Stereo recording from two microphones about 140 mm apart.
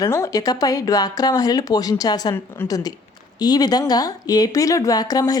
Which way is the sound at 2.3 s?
15° left (ahead or behind).